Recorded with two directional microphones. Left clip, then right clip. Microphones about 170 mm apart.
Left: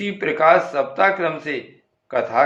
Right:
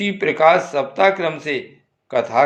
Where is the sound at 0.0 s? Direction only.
35° right (ahead or behind).